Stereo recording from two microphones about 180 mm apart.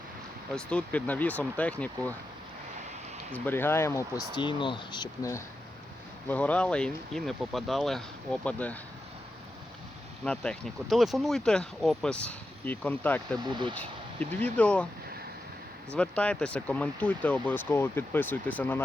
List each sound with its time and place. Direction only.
0.5 s speech: 5° left (ahead or behind)
3.3 s speech: 10° left (ahead or behind)
6.2 s speech: 10° left (ahead or behind)
10.2 s speech: 5° left (ahead or behind)
13.4 s speech: 25° right (ahead or behind)
13.7 s speech: 10° left (ahead or behind)
16.0 s speech: 5° left (ahead or behind)